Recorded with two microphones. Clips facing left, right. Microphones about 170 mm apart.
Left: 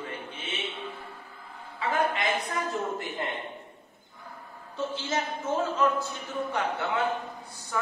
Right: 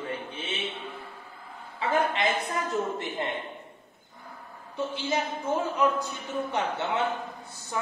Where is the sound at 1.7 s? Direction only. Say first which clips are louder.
Right 1 dB; 30° right (ahead or behind).